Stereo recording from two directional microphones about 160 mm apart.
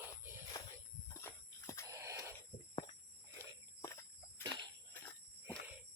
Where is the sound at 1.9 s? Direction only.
20° right (ahead or behind).